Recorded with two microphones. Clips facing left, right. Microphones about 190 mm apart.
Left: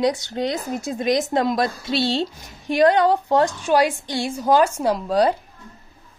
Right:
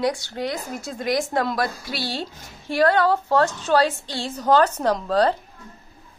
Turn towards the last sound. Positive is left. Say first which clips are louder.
# left 1 dB
turn(degrees=10)  # may be behind; listen again after turning